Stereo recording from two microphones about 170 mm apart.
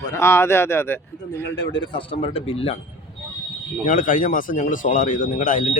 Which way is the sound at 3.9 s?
50° left (ahead or behind).